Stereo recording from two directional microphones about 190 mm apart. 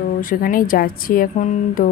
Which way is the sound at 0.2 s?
45° left (ahead or behind).